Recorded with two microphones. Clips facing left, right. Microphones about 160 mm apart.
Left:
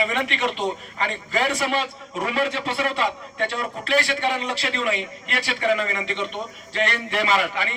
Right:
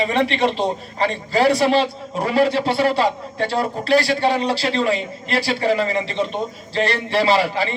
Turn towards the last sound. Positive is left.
turn(degrees=-35)  # may be behind; listen again after turning